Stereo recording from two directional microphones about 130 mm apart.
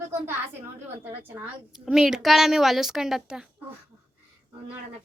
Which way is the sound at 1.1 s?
15° right (ahead or behind).